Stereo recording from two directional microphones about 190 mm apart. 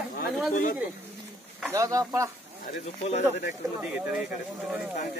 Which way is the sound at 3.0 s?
40° left (ahead or behind).